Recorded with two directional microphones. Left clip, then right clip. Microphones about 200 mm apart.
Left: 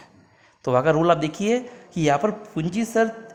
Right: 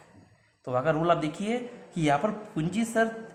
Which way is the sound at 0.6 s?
45° left (ahead or behind).